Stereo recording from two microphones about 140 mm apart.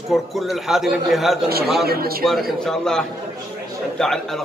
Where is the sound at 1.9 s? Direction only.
90° right.